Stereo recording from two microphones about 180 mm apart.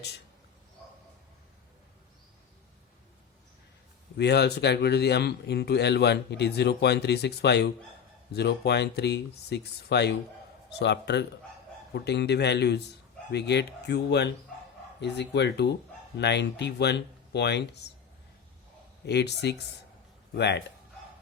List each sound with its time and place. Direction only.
4.2 s a man's voice: 65° left (ahead or behind)
19.0 s a man's voice: 70° left (ahead or behind)